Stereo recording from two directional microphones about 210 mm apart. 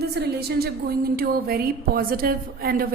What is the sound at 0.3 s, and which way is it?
A woman's voice, 50° right (ahead or behind).